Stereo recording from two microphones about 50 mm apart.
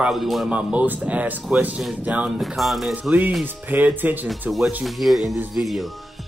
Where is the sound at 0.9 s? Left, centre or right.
Right.